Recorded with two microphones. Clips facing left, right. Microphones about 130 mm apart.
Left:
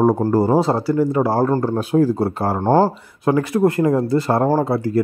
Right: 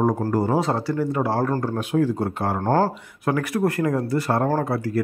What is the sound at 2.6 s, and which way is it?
Speech, 20° left (ahead or behind).